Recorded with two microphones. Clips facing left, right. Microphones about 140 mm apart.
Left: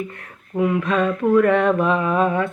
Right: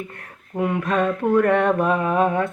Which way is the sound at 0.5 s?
40° right (ahead or behind).